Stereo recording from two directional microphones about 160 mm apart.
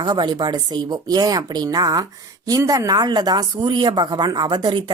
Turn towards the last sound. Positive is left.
turn(degrees=-30)  # may be behind; listen again after turning